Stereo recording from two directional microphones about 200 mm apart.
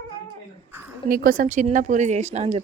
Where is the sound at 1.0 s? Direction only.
45° right (ahead or behind).